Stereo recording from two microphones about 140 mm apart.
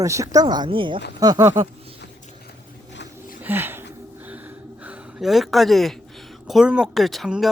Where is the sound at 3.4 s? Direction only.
15° right (ahead or behind).